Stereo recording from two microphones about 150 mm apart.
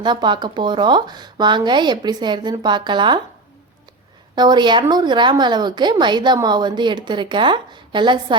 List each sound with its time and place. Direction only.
0.0 s speech: 30° right (ahead or behind)
4.4 s a woman's voice: 30° right (ahead or behind)